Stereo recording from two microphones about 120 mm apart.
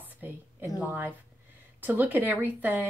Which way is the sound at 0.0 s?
15° right (ahead or behind).